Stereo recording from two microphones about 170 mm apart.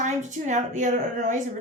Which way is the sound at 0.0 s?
45° right (ahead or behind).